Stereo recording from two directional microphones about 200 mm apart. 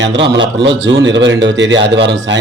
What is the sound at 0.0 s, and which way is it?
A man's voice, 60° right (ahead or behind).